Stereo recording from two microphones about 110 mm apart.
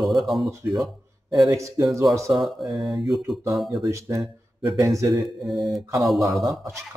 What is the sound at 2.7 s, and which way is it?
Speech, centre (ahead or behind).